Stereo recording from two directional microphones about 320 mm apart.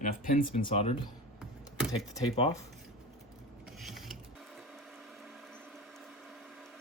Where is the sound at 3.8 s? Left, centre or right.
Centre.